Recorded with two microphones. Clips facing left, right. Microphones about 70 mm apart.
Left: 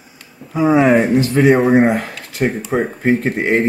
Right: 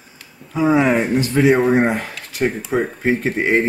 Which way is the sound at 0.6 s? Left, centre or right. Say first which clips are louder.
Left 3 dB; centre.